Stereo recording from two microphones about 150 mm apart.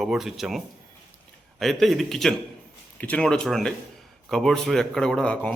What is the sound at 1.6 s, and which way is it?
A man's voice, centre (ahead or behind).